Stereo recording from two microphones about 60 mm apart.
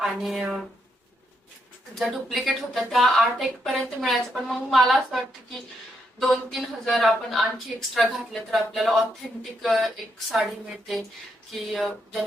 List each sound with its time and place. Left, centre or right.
0.0 s a woman's voice: centre
2.0 s a woman's voice: centre